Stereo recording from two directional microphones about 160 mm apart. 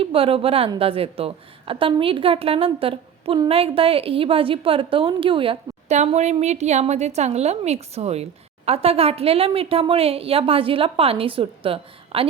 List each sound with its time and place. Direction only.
0.0 s a woman's voice: 35° right (ahead or behind)